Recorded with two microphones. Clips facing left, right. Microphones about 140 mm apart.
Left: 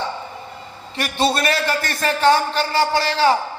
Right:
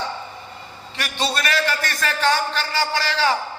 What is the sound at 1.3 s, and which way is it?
Speech, 30° left (ahead or behind).